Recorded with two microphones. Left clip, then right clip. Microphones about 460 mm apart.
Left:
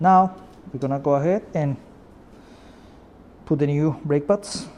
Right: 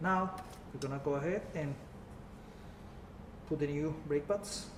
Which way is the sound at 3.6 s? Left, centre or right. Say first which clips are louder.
Left 13 dB; left.